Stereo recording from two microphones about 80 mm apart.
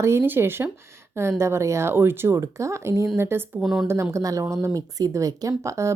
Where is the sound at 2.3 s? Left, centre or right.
Right.